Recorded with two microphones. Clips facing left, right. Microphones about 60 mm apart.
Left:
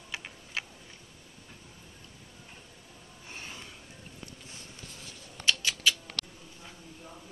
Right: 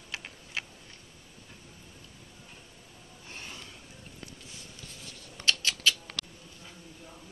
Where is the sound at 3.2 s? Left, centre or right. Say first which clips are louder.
Left 1 dB; centre.